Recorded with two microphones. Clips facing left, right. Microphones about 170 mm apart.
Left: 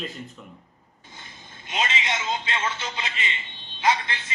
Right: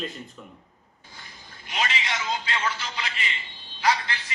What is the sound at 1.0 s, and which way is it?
Telephone, 20° left (ahead or behind).